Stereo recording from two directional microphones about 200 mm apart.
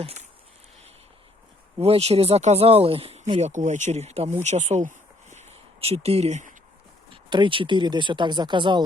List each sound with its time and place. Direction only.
0.0 s speech: 35° right (ahead or behind)
1.8 s speech: 30° right (ahead or behind)
7.1 s speech: 25° right (ahead or behind)